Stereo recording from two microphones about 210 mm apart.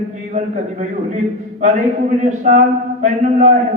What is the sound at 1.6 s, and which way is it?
A man's voice, 35° right (ahead or behind).